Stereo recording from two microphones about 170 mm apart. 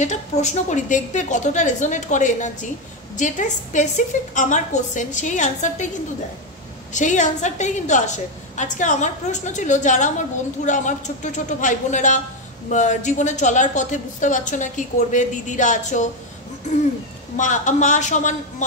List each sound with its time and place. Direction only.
0.0 s a woman's voice: 45° left (ahead or behind)
6.9 s a woman's voice: 45° left (ahead or behind)
17.4 s a woman's voice: 45° left (ahead or behind)